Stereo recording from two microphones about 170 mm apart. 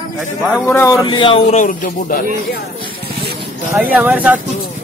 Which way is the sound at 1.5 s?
55° left (ahead or behind).